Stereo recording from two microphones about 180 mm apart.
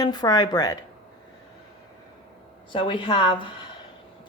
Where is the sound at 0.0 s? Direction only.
20° left (ahead or behind).